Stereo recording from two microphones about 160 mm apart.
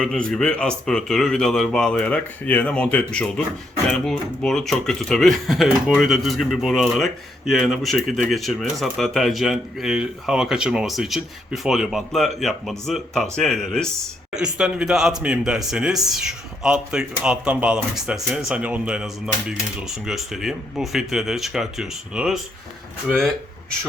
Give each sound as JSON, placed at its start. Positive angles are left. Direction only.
{"t": 0.0, "sound": "speech", "side_deg": 5}